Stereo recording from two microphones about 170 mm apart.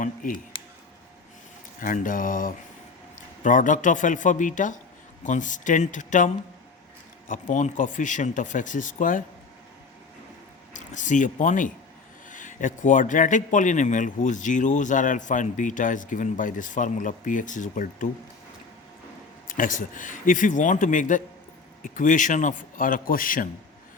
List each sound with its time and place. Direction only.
0.0 s speech: 50° left (ahead or behind)
1.8 s a man's voice: 55° left (ahead or behind)
10.8 s a man's voice: 45° left (ahead or behind)
19.5 s a man's voice: 50° left (ahead or behind)